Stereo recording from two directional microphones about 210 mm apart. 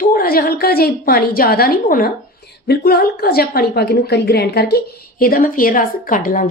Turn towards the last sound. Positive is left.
turn(degrees=40)  # may be behind; listen again after turning